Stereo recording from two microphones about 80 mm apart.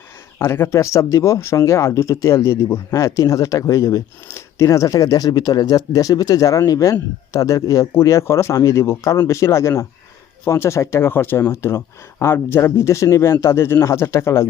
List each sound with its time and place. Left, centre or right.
0.3 s speech: left